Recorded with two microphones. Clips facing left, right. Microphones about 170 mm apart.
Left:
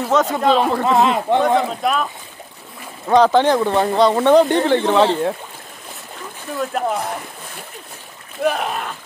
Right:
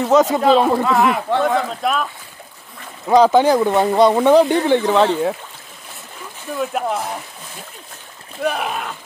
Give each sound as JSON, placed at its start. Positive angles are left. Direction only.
{"t": 0.0, "sound": "speech", "side_deg": -5}
{"t": 0.8, "sound": "speech", "side_deg": 20}
{"t": 1.7, "sound": "speech", "side_deg": 0}
{"t": 3.1, "sound": "speech", "side_deg": -10}
{"t": 6.6, "sound": "speech", "side_deg": -5}
{"t": 8.4, "sound": "speech", "side_deg": 0}